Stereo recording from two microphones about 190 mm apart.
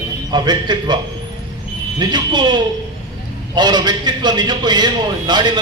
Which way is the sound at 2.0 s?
20° right (ahead or behind).